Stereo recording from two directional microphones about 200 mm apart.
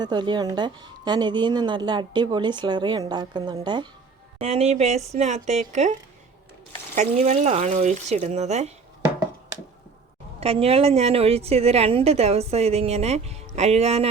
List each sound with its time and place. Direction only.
0.0 s a woman's voice: 20° right (ahead or behind)
10.4 s a woman's voice: 30° right (ahead or behind)